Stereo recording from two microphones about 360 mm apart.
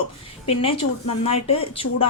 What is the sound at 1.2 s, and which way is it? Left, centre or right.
Speech, centre.